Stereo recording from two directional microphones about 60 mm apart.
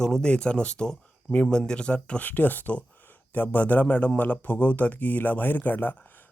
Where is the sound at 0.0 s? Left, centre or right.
Centre.